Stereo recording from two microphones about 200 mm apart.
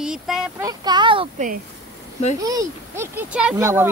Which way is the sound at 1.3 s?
40° right (ahead or behind).